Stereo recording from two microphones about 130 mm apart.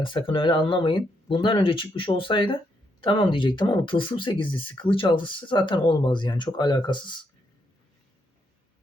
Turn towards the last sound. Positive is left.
turn(degrees=35)  # may be behind; listen again after turning